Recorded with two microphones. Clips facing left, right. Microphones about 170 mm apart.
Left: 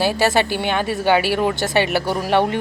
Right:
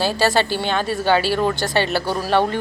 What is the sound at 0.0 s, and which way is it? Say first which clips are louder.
A woman's voice: left 1 dB; 20° left (ahead or behind).